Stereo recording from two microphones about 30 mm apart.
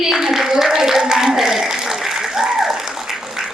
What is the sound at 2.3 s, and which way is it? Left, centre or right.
Applause, centre.